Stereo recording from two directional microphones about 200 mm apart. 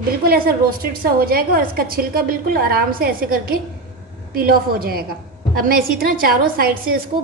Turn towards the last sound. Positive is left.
turn(degrees=-50)  # may be behind; listen again after turning